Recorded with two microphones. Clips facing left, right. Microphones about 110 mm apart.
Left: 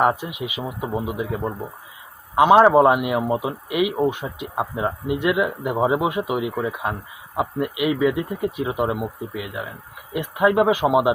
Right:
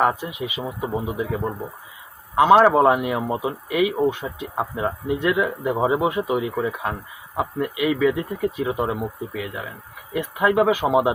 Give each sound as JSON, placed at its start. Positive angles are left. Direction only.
{"t": 0.2, "sound": "speech", "side_deg": 15}
{"t": 3.7, "sound": "speech", "side_deg": 15}